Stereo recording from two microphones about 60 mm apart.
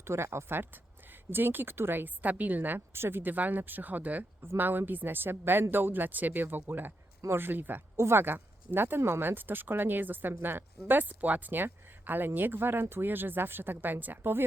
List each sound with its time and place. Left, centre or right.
0.0 s speech: right
7.9 s speech: right
9.0 s speech: right